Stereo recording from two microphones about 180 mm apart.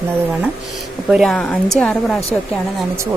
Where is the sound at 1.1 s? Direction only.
Centre (ahead or behind).